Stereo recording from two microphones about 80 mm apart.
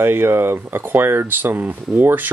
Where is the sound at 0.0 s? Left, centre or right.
Right.